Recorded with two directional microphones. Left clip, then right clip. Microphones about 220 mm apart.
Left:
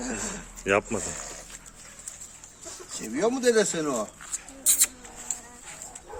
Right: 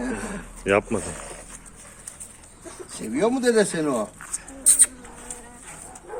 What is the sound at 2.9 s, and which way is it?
Speech, 30° right (ahead or behind).